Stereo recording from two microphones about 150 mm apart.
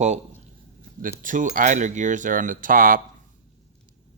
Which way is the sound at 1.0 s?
60° right (ahead or behind).